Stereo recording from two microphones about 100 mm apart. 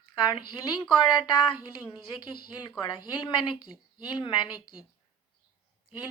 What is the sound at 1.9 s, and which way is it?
Speech, 50° left (ahead or behind).